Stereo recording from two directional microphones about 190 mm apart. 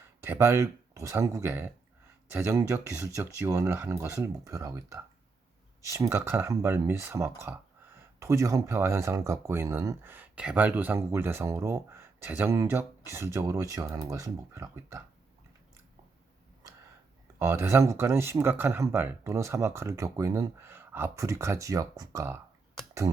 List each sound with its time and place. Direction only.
0.2 s speech: 15° right (ahead or behind)
17.4 s speech: 15° right (ahead or behind)